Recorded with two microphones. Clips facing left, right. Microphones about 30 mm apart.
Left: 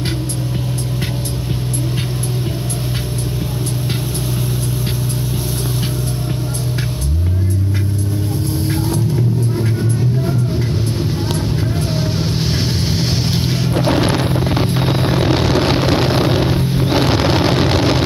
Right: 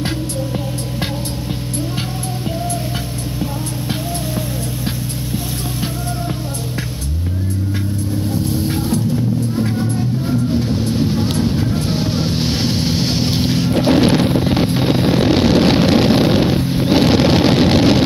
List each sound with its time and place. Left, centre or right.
11.8 s vehicle: right
13.7 s music: centre
14.2 s wind noise: centre
14.8 s explosion: centre
16.8 s vehicle: centre